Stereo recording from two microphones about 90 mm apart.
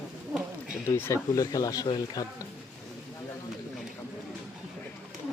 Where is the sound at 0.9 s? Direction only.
25° left (ahead or behind).